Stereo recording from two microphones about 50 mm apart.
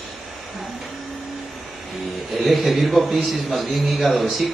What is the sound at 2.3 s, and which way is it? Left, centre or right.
A man's voice, centre.